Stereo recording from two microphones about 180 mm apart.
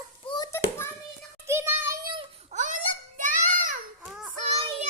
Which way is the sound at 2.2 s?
45° right (ahead or behind).